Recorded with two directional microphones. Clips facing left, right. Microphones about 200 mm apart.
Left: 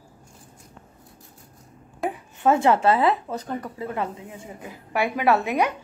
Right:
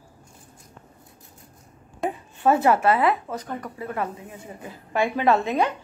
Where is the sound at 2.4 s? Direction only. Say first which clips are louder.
Even; 20° left (ahead or behind).